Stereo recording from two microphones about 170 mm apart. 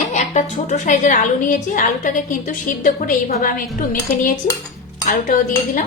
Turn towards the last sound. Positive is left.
turn(degrees=50)  # may be behind; listen again after turning